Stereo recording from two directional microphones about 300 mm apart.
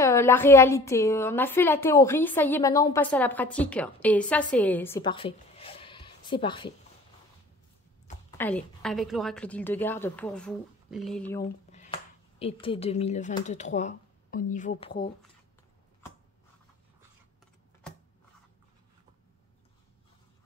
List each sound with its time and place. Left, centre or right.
0.0 s a woman's voice: centre
8.3 s a woman's voice: centre
11.7 s speech: left